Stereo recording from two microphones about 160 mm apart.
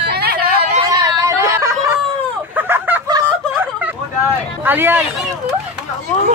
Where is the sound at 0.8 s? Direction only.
20° right (ahead or behind).